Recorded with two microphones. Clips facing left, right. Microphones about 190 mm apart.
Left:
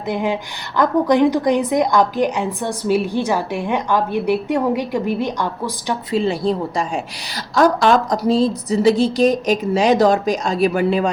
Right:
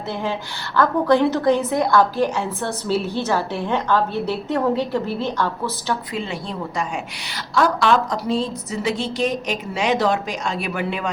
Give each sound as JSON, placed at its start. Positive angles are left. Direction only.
{"t": 0.1, "sound": "a woman's voice", "side_deg": 15}
{"t": 6.1, "sound": "a woman's voice", "side_deg": 35}